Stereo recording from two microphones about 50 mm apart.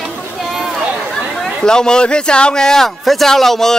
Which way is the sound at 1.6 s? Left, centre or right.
Centre.